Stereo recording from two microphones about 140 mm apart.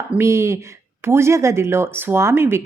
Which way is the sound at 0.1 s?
20° right (ahead or behind).